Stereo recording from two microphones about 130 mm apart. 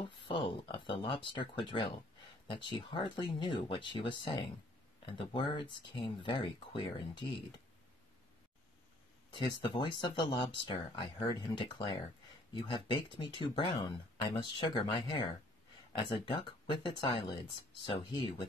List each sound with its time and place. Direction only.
0.0 s speech: 40° left (ahead or behind)
9.3 s speech: 35° left (ahead or behind)